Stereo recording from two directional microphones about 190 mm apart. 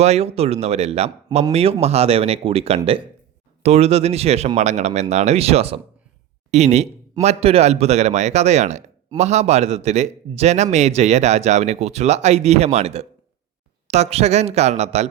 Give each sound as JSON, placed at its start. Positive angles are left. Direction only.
{"t": 0.0, "sound": "a man's voice", "side_deg": -35}